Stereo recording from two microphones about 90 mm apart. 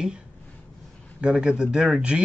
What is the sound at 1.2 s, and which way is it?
Speech, 10° right (ahead or behind).